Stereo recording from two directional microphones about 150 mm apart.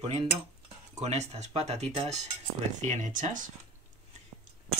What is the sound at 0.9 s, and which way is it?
Speech, 50° right (ahead or behind).